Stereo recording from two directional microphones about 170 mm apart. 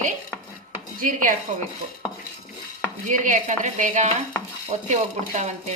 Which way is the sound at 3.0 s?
50° right (ahead or behind).